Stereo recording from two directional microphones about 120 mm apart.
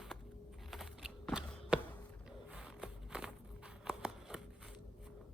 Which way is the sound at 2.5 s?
5° right (ahead or behind).